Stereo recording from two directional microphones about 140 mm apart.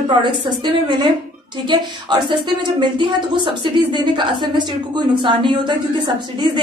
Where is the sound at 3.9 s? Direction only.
35° right (ahead or behind).